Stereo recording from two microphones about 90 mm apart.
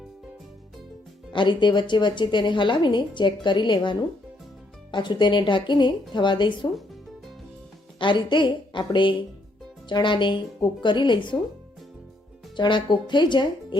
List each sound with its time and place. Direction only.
1.3 s speech: 60° left (ahead or behind)
7.9 s speech: 60° left (ahead or behind)
12.5 s speech: 60° left (ahead or behind)